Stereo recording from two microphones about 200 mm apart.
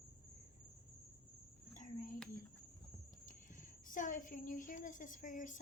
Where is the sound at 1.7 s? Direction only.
40° left (ahead or behind).